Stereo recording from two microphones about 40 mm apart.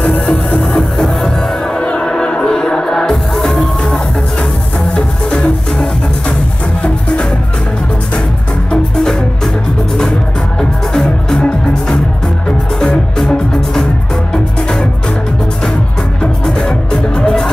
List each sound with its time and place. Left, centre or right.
0.0 s music: left
0.7 s music: centre
1.8 s a sound: left
2.1 s music: left
10.6 s music: centre
14.3 s music: centre
16.2 s music: centre